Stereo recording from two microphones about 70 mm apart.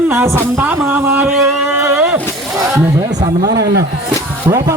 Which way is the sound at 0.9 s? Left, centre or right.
Right.